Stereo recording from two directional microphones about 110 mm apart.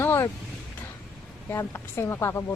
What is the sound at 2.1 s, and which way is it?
Speech, 25° left (ahead or behind).